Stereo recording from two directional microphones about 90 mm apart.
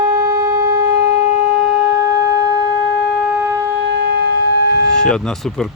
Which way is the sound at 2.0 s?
35° right (ahead or behind).